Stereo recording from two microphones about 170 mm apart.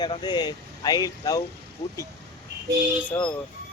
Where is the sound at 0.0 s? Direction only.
25° left (ahead or behind).